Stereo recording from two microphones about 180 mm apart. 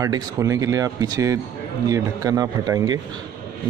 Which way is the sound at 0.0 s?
20° right (ahead or behind).